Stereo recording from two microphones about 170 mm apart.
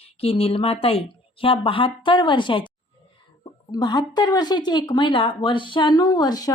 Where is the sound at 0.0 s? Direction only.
35° left (ahead or behind).